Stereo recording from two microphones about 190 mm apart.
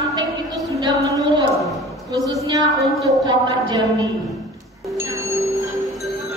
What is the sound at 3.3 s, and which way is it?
Speech, 25° right (ahead or behind).